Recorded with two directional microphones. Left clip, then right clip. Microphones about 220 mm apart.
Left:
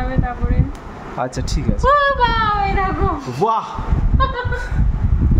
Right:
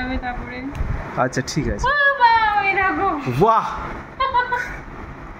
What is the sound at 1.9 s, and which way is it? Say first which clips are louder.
Speech: left 1 dB; 35° left (ahead or behind).